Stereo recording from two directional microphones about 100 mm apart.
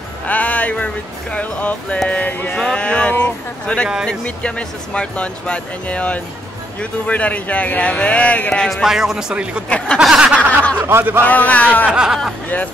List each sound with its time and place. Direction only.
0.3 s speech: 15° left (ahead or behind)
8.8 s speech: 5° right (ahead or behind)
9.7 s speech: 10° left (ahead or behind)
9.9 s speech: 10° right (ahead or behind)
10.8 s speech: 20° right (ahead or behind)
11.2 s speech: 15° left (ahead or behind)
11.9 s speech: 10° right (ahead or behind)